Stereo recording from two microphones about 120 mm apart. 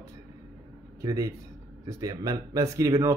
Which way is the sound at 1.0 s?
30° right (ahead or behind).